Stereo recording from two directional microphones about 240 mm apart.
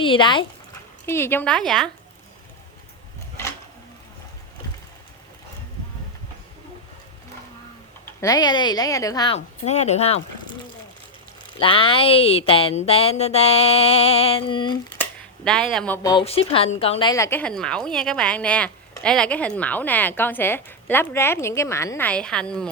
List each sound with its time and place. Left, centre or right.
0.0 s a woman's voice: left; by 1.9 s centre
8.0 s a woman's voice: centre
11.6 s speech: left
15.4 s a woman's voice: centre
16.0 s a woman's voice: left; by 22.7 s centre